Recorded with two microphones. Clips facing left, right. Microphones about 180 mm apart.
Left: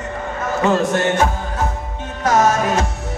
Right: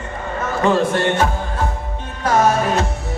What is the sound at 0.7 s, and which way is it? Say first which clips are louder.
Music: even; 45° left (ahead or behind).